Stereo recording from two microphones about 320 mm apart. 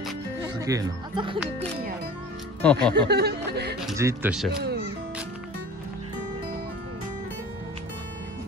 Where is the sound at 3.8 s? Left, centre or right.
Centre.